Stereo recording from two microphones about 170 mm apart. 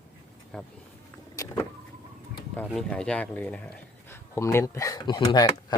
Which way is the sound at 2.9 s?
5° left (ahead or behind).